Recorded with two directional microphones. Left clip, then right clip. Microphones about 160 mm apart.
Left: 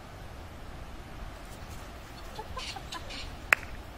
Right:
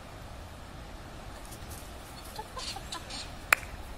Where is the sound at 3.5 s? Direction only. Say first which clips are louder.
Even; 10° left (ahead or behind).